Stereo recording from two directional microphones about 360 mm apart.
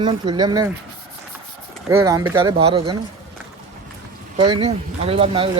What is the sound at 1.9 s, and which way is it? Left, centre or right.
Speech, centre.